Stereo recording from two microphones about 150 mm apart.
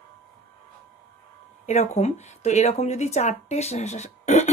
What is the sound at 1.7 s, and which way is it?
Speech, 45° left (ahead or behind).